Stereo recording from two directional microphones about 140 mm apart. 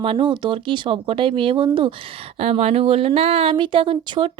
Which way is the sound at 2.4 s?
45° right (ahead or behind).